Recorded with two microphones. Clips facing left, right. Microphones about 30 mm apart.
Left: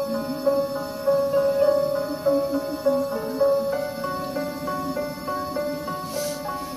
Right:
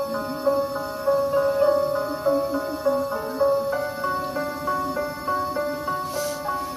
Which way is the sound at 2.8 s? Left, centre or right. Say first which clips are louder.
Left 1 dB; right.